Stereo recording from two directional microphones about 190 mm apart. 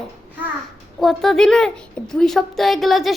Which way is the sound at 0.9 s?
Centre (ahead or behind).